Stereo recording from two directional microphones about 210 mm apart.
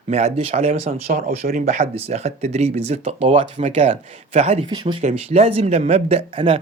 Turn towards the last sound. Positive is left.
turn(degrees=-25)  # may be behind; listen again after turning